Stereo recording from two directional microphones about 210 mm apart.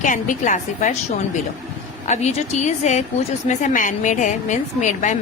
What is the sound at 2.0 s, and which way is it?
A woman's voice, 35° left (ahead or behind).